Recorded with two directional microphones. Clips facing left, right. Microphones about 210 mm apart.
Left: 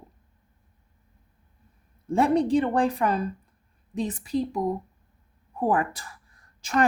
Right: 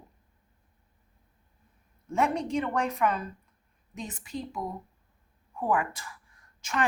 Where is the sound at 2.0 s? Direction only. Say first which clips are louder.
Left 7 dB; 35° left (ahead or behind).